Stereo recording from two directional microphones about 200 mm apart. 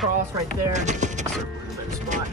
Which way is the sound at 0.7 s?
35° right (ahead or behind).